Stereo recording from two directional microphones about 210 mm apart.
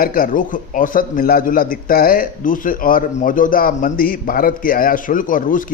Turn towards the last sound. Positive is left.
turn(degrees=40)  # may be behind; listen again after turning